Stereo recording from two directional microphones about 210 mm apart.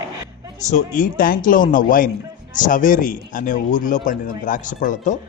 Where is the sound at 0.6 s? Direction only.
35° left (ahead or behind).